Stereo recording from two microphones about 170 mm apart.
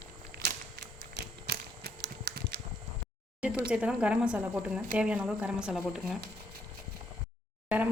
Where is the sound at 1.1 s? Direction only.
80° right.